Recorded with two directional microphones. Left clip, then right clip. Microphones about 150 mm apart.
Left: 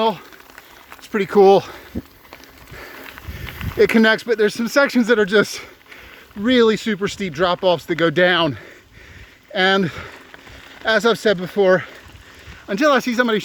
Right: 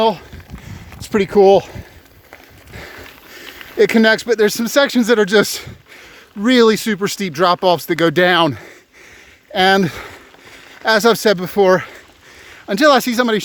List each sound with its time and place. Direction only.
1.3 s speech: 15° right (ahead or behind)
3.8 s speech: 25° right (ahead or behind); by 4.6 s 45° right (ahead or behind)
4.6 s speech: 30° right (ahead or behind)
5.0 s speech: 45° right (ahead or behind)
5.5 s speech: 30° right (ahead or behind)
6.4 s speech: 45° right (ahead or behind)
12.6 s speech: 40° right (ahead or behind)